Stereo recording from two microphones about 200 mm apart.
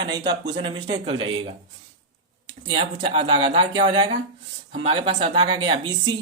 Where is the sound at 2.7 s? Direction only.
30° right (ahead or behind).